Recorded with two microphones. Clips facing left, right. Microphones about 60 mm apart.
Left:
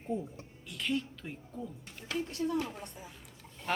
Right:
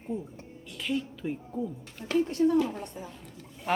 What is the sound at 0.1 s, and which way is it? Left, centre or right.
Speech, centre.